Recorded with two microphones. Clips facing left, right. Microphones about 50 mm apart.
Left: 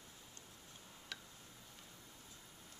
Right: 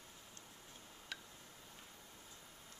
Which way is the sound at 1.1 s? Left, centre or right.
Centre.